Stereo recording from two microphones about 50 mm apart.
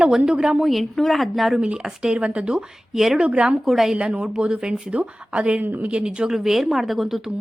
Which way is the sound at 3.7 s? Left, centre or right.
Centre.